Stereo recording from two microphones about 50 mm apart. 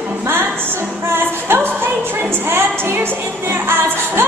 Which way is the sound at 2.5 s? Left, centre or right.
Right.